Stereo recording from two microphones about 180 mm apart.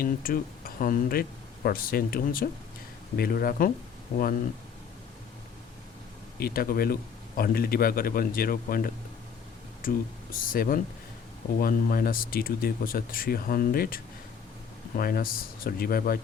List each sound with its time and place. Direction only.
0.0 s speech: 55° left (ahead or behind)
6.4 s speech: 55° left (ahead or behind)